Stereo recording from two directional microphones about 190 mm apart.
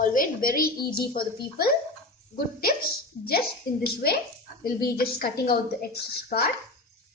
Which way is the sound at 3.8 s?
55° left (ahead or behind).